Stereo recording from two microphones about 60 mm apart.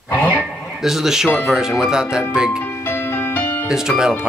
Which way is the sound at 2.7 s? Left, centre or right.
Left.